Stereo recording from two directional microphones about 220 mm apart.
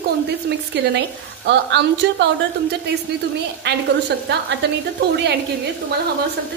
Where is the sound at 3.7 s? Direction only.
50° right (ahead or behind).